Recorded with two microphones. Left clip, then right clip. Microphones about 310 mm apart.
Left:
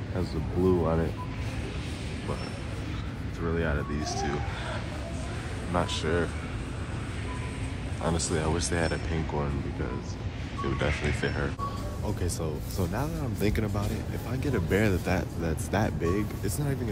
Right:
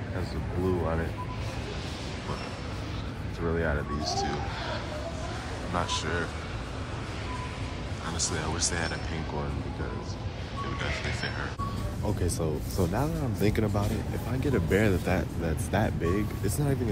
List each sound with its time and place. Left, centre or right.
0.2 s speech: centre
3.4 s speech: centre
4.0 s speech: centre
5.7 s speech: centre
8.4 s speech: centre
12.2 s speech: centre